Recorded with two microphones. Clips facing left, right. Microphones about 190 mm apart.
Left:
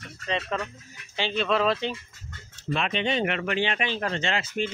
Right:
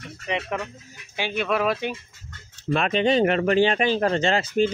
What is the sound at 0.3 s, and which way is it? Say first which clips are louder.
Speech: right 1 dB; 15° right (ahead or behind).